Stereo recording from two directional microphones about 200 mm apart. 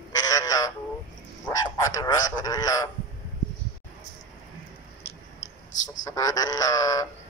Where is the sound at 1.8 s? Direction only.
15° left (ahead or behind).